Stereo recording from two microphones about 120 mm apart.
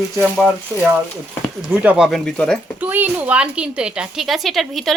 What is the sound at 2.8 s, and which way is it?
A woman's voice, 15° right (ahead or behind).